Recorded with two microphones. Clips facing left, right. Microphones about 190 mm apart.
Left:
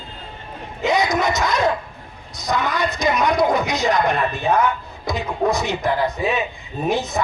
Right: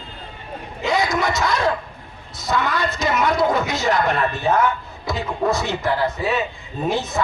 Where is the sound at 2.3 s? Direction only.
15° left (ahead or behind).